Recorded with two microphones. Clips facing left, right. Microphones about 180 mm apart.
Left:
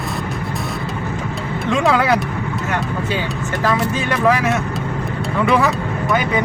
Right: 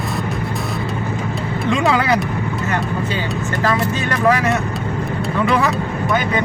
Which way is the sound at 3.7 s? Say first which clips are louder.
Left 1 dB; 5° left (ahead or behind).